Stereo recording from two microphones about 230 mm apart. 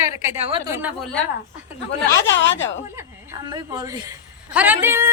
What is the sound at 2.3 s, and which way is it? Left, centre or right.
Speech, left.